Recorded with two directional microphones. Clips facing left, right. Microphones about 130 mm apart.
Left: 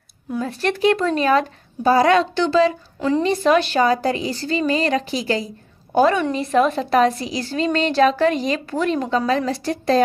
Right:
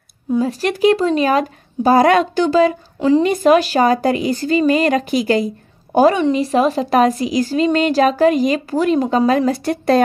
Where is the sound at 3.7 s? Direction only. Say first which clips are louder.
Right 3 dB; 45° right (ahead or behind).